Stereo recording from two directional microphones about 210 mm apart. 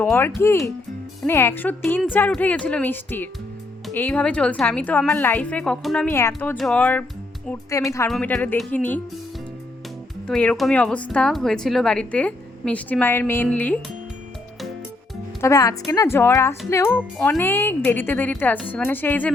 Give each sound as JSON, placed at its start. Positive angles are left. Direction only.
{"t": 0.0, "sound": "a woman's voice", "side_deg": 10}
{"t": 10.2, "sound": "a woman's voice", "side_deg": 5}
{"t": 15.4, "sound": "a woman's voice", "side_deg": 15}